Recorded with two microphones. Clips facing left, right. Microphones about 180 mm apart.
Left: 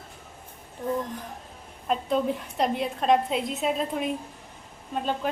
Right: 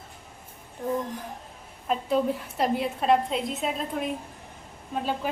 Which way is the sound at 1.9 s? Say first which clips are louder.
Even; centre (ahead or behind).